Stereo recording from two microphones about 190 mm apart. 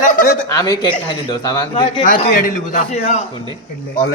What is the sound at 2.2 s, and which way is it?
A man's voice, 40° left (ahead or behind).